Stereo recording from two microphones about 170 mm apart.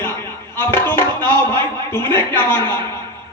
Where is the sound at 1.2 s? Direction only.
25° right (ahead or behind).